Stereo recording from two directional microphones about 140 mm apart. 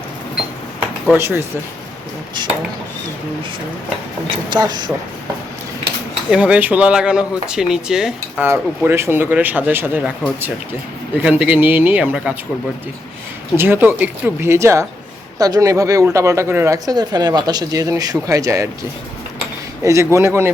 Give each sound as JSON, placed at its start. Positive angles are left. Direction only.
{"t": 1.1, "sound": "speech", "side_deg": -15}
{"t": 4.4, "sound": "speech", "side_deg": -30}
{"t": 6.3, "sound": "speech", "side_deg": -10}
{"t": 8.4, "sound": "speech", "side_deg": -15}
{"t": 11.2, "sound": "speech", "side_deg": -10}
{"t": 13.6, "sound": "speech", "side_deg": -15}
{"t": 19.8, "sound": "speech", "side_deg": -20}